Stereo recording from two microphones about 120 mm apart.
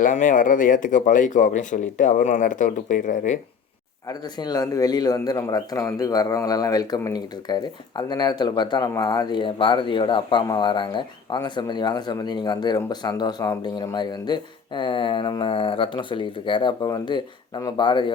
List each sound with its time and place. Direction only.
0.1 s speech: 90° left
4.1 s speech: 35° left (ahead or behind)